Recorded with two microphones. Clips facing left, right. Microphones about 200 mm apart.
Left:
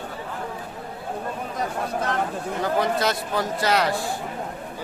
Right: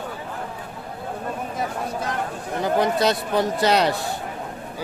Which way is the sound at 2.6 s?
20° right (ahead or behind).